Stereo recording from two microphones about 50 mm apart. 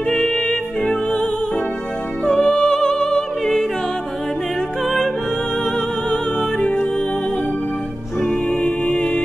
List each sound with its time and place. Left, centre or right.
0.1 s music: centre
4.8 s music: centre
8.2 s music: centre
8.6 s music: left